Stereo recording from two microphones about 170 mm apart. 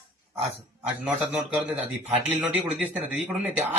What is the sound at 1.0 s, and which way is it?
A man's voice, 5° right (ahead or behind).